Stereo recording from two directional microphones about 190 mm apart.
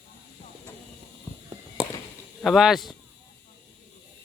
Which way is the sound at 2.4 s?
Centre (ahead or behind).